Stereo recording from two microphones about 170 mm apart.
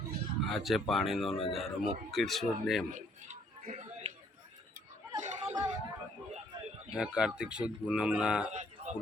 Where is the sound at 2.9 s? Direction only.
45° right (ahead or behind).